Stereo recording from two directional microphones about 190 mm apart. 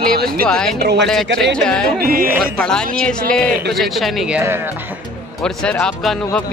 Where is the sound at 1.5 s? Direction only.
5° left (ahead or behind).